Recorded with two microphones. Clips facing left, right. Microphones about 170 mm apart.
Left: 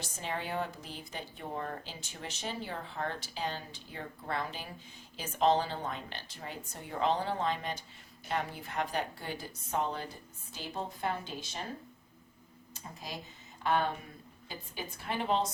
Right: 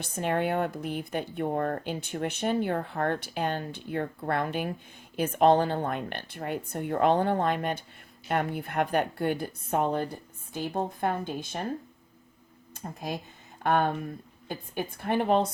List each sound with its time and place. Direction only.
0.0 s a woman's voice: 60° right (ahead or behind)
12.7 s speech: 55° right (ahead or behind)